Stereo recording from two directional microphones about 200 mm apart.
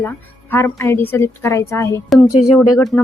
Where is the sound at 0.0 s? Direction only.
10° left (ahead or behind).